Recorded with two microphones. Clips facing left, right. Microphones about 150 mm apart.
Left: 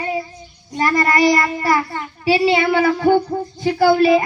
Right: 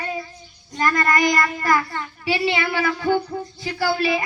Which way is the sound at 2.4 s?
40° left (ahead or behind).